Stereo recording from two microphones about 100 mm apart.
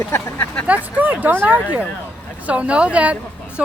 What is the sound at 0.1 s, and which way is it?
Speech, 25° left (ahead or behind).